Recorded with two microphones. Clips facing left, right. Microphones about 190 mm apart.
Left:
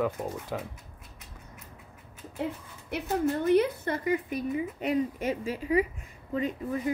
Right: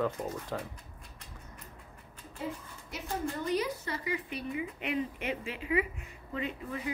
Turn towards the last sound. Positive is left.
turn(degrees=40)  # may be behind; listen again after turning